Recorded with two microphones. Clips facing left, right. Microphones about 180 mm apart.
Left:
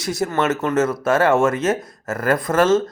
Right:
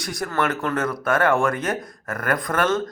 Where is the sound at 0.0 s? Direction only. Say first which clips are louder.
Left 4 dB; 25° left (ahead or behind).